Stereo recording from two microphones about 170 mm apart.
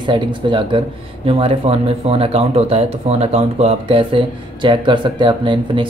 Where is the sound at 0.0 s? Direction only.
30° right (ahead or behind).